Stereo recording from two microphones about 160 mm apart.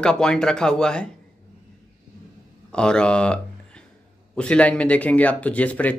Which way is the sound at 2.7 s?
5° left (ahead or behind).